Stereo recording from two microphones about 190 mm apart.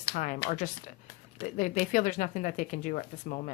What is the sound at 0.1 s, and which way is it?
A woman's voice, 45° left (ahead or behind).